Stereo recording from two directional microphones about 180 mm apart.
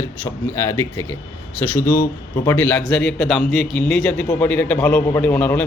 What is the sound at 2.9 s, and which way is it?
Speech, 5° left (ahead or behind).